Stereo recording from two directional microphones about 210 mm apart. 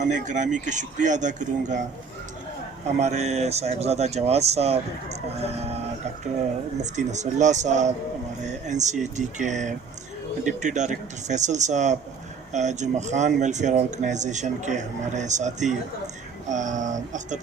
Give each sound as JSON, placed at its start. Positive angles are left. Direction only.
{"t": 0.0, "sound": "speech", "side_deg": -35}
{"t": 3.0, "sound": "speech", "side_deg": -30}
{"t": 6.9, "sound": "speech", "side_deg": -35}